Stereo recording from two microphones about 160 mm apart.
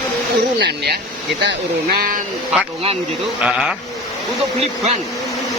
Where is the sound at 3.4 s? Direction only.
5° right (ahead or behind).